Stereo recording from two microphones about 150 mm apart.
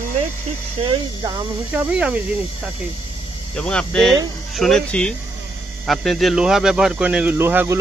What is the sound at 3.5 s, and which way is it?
Speech, 5° left (ahead or behind).